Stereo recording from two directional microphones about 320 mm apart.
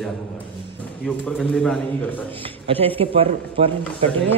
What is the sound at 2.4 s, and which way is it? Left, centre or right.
Speech, centre.